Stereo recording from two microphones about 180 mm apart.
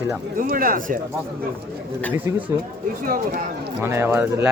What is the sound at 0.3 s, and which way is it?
Speech, 50° right (ahead or behind).